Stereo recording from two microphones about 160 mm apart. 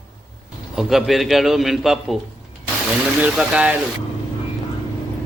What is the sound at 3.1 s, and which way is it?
Speech, 10° right (ahead or behind).